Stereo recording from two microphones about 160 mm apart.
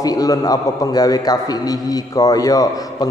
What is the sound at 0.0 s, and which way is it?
A man's voice, 20° left (ahead or behind).